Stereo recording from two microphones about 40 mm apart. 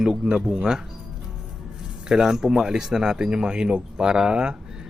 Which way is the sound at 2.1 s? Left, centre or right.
Centre.